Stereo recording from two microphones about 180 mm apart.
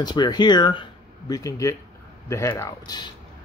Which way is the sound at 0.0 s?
25° left (ahead or behind).